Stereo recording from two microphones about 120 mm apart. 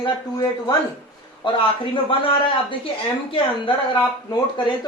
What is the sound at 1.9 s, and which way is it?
Speech, 50° left (ahead or behind).